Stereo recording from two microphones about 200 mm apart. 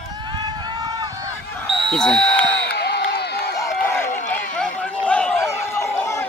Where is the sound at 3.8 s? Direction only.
10° left (ahead or behind).